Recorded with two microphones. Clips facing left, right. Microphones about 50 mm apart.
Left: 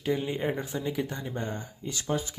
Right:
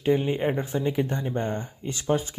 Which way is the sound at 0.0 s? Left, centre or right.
Right.